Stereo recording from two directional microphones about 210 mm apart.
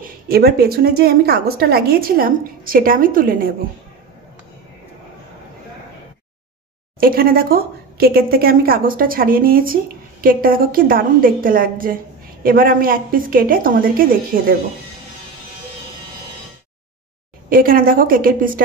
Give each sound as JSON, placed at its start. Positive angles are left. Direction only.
{"t": 0.0, "sound": "a woman's voice", "side_deg": -45}
{"t": 7.0, "sound": "a woman's voice", "side_deg": -45}
{"t": 17.5, "sound": "a woman's voice", "side_deg": -45}